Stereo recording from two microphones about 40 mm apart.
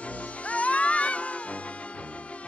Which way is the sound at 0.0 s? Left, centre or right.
Left.